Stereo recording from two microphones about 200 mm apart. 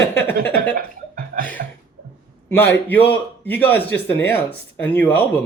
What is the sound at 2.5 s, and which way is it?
Speech, 10° left (ahead or behind).